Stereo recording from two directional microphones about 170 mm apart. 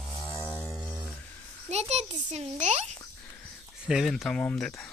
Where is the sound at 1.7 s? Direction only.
40° right (ahead or behind).